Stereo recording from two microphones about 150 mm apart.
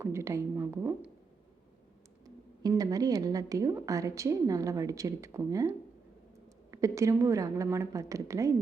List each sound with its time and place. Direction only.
0.0 s a woman's voice: 20° right (ahead or behind)
2.2 s a woman's voice: 25° right (ahead or behind)